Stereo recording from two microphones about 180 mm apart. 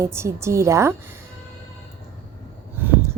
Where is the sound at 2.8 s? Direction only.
10° right (ahead or behind).